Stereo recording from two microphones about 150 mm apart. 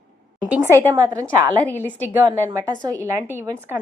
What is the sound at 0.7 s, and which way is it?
Speech, 20° right (ahead or behind).